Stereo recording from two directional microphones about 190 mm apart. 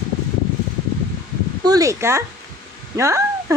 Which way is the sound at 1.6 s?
20° right (ahead or behind).